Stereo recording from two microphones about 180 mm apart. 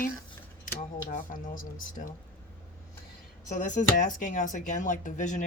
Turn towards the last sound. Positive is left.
turn(degrees=45)  # may be behind; listen again after turning